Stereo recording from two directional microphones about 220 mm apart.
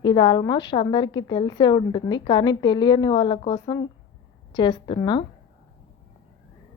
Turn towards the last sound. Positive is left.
turn(degrees=20)  # may be behind; listen again after turning